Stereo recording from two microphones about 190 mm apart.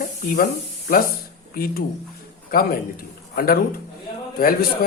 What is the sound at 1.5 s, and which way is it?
A man's voice, 50° left (ahead or behind).